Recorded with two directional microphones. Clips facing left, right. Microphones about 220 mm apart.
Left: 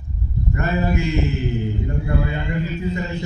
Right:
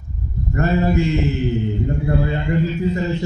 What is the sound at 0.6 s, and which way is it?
Mantra, 35° right (ahead or behind).